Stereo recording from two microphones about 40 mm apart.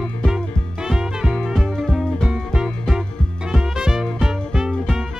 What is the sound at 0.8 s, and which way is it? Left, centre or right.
Music, centre.